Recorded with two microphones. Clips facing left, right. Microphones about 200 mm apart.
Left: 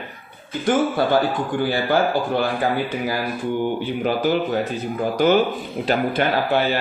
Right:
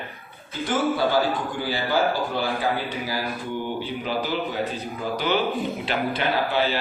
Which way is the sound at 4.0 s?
50° left (ahead or behind).